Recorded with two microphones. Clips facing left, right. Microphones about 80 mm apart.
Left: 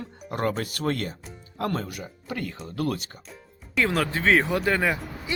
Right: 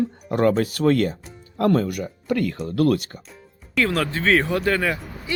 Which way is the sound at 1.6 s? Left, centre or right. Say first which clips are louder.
Right 9 dB; right.